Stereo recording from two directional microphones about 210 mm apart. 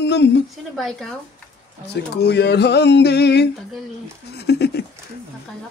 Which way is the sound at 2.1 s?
50° left (ahead or behind).